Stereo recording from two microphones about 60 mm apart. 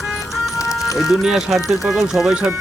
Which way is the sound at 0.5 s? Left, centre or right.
Left.